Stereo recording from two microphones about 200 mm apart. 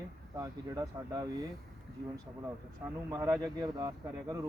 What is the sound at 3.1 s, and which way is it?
Speech, 20° right (ahead or behind).